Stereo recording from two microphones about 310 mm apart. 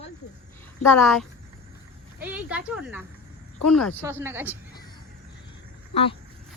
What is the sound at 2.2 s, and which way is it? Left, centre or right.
A woman's voice, centre.